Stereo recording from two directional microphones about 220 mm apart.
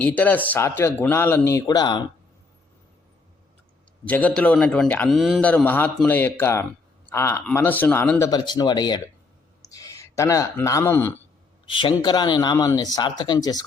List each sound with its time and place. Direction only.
0.0 s a man's voice: 5° left (ahead or behind)
4.0 s a man's voice: 5° left (ahead or behind)
8.3 s speech: 20° left (ahead or behind)
11.7 s speech: 25° left (ahead or behind)